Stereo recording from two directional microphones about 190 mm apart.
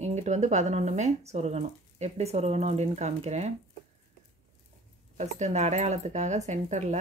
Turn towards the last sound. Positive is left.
turn(degrees=-40)  # may be behind; listen again after turning